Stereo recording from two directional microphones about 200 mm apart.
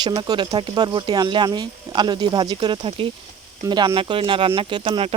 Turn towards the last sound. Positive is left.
turn(degrees=-30)  # may be behind; listen again after turning